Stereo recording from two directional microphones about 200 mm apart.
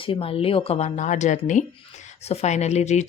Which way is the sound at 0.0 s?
25° left (ahead or behind).